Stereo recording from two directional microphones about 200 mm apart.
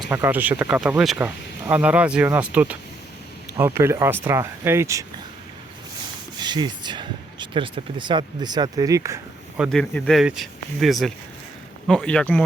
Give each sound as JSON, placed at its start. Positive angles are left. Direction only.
{"t": 0.0, "sound": "speech", "side_deg": -10}
{"t": 6.4, "sound": "speech", "side_deg": -20}
{"t": 9.6, "sound": "speech", "side_deg": 5}